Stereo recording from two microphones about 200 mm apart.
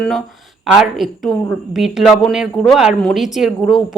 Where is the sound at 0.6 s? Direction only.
Centre (ahead or behind).